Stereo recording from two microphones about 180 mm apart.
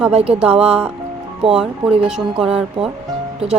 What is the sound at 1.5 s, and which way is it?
Speech, 5° right (ahead or behind).